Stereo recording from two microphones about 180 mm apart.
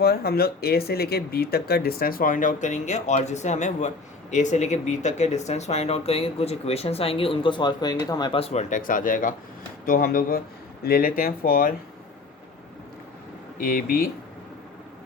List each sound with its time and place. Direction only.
0.0 s speech: 60° left (ahead or behind)
13.6 s speech: 50° left (ahead or behind)